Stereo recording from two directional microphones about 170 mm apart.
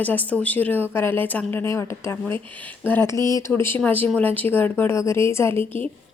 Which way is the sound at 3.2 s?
25° right (ahead or behind).